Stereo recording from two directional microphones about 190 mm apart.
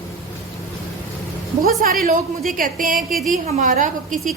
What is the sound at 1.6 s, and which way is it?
A woman's voice, 50° right (ahead or behind).